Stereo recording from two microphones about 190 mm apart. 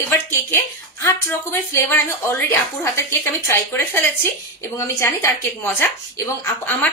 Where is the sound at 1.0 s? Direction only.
15° left (ahead or behind).